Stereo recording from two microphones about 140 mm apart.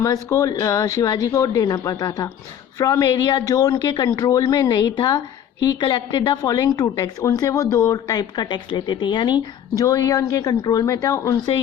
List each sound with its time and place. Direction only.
0.0 s a woman's voice: 20° left (ahead or behind)